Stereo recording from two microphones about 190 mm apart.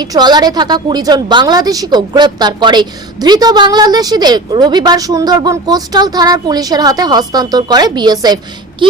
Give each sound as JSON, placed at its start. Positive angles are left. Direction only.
{"t": 0.0, "sound": "a woman's voice", "side_deg": -20}